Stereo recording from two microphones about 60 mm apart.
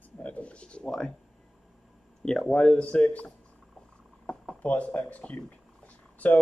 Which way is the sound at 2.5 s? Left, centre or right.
Centre.